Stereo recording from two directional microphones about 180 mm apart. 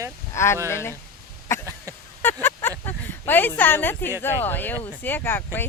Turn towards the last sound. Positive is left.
turn(degrees=10)  # may be behind; listen again after turning